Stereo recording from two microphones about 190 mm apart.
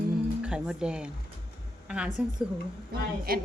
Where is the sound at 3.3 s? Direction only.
50° right (ahead or behind).